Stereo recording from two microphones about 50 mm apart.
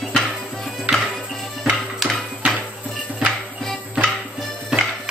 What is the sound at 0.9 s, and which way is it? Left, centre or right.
Music, right.